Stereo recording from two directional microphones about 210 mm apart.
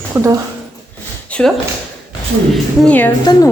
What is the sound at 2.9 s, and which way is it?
Speech, 10° left (ahead or behind).